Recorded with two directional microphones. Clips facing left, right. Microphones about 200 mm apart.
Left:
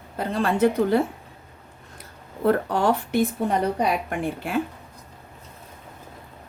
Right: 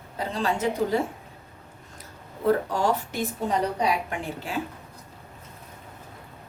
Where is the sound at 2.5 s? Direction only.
60° left (ahead or behind).